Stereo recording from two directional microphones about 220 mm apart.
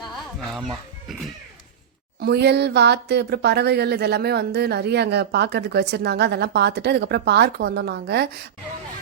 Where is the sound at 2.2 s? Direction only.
50° right (ahead or behind).